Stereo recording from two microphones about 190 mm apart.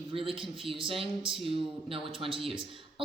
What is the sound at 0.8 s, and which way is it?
A woman's voice, 30° right (ahead or behind).